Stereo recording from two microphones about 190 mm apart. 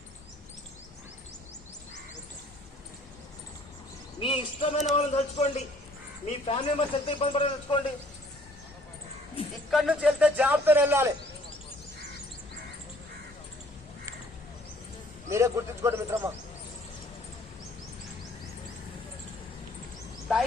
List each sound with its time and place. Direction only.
4.2 s a man's voice: 30° left (ahead or behind)
9.6 s speech: centre (ahead or behind)
15.3 s speech: 15° right (ahead or behind)